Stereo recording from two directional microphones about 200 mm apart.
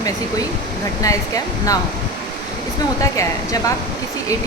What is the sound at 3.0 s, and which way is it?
Speech, 15° left (ahead or behind).